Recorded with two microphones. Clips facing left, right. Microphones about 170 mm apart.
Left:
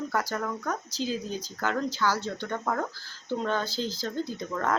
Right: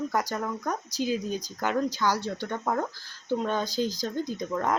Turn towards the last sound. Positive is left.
turn(degrees=-15)  # may be behind; listen again after turning